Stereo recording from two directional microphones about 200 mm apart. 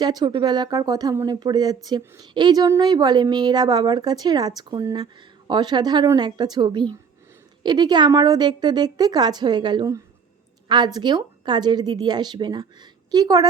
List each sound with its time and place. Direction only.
0.0 s speech: 20° right (ahead or behind)